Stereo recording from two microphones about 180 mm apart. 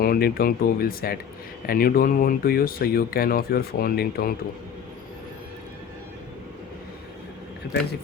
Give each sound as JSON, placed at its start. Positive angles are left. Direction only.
{"t": 0.0, "sound": "speech", "side_deg": 55}